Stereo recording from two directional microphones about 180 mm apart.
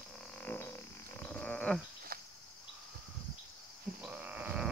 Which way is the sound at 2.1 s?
55° right (ahead or behind).